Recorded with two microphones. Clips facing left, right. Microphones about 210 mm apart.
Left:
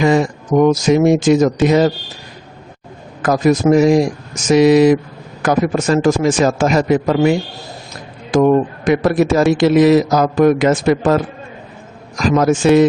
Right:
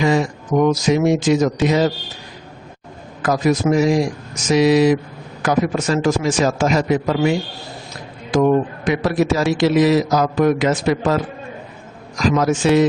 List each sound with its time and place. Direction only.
0.0 s a man's voice: 50° left (ahead or behind)
3.2 s a man's voice: 50° left (ahead or behind)
12.2 s a man's voice: 50° left (ahead or behind)